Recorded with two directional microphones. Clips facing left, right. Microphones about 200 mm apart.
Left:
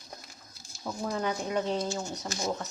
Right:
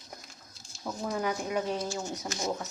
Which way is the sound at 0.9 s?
5° right (ahead or behind).